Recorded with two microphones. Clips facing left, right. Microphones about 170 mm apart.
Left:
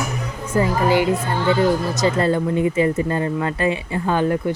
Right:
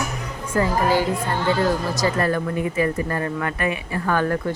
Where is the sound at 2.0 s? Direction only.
20° left (ahead or behind).